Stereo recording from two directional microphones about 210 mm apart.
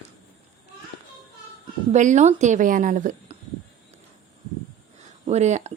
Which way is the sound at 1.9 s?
35° right (ahead or behind).